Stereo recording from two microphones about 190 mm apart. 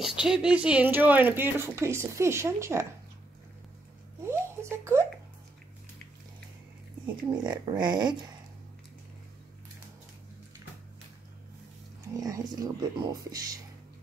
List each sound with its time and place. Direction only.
0.0 s speech: 5° right (ahead or behind)
4.2 s a sound: 15° right (ahead or behind)
7.4 s speech: 20° right (ahead or behind)
12.1 s speech: 20° right (ahead or behind)